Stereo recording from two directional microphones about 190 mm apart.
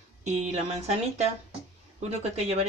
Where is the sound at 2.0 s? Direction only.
35° right (ahead or behind).